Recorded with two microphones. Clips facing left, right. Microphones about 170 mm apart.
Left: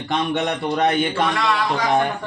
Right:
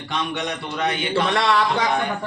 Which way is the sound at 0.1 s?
50° left (ahead or behind).